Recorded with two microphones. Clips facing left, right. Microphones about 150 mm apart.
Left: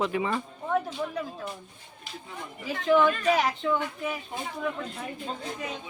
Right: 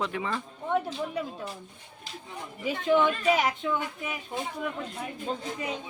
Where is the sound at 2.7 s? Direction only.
20° right (ahead or behind).